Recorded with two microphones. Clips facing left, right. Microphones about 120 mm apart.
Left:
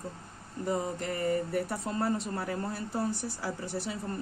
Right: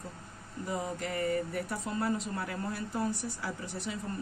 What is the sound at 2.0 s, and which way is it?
Speech, 35° left (ahead or behind).